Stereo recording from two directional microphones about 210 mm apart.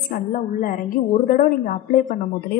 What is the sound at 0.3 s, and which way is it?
A woman's voice, 40° left (ahead or behind).